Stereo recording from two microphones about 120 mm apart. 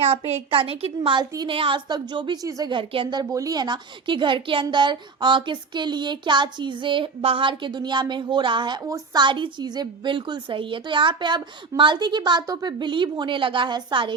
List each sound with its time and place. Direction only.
0.3 s a woman's voice: 55° right (ahead or behind); by 2.7 s 30° right (ahead or behind)
2.7 s a woman's voice: 45° right (ahead or behind)
8.8 s a woman's voice: 25° right (ahead or behind)